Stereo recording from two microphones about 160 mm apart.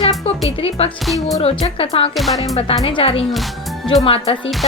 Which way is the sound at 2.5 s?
35° left (ahead or behind).